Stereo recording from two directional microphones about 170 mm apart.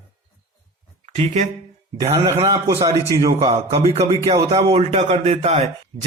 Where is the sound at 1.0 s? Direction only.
40° right (ahead or behind).